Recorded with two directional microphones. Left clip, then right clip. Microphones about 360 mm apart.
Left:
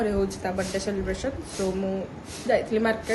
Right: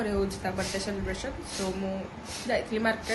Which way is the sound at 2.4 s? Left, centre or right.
Centre.